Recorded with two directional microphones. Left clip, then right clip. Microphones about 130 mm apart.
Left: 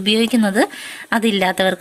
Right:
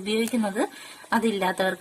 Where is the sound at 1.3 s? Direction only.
30° left (ahead or behind).